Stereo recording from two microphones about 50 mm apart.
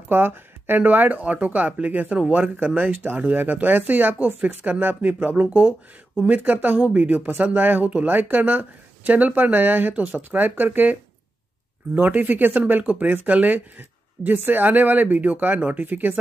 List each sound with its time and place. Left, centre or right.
0.1 s speech: right